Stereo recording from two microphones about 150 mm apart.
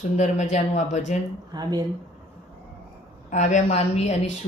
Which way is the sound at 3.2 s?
55° left (ahead or behind).